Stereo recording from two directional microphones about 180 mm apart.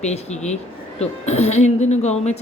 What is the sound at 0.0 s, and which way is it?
A woman's voice, 40° left (ahead or behind).